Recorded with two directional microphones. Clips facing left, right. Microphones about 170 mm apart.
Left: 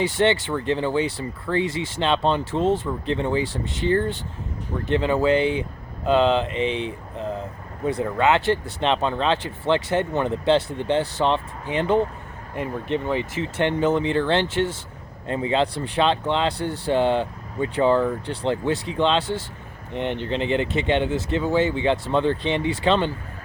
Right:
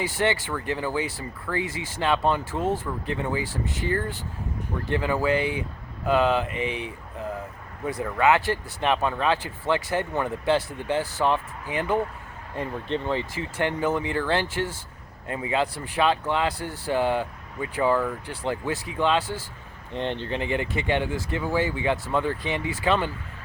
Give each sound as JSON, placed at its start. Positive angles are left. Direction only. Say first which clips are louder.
{"t": 0.0, "sound": "speech", "louder": "left 5 dB", "side_deg": 25}